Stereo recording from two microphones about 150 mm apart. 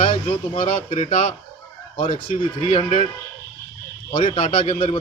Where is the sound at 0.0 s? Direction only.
35° left (ahead or behind).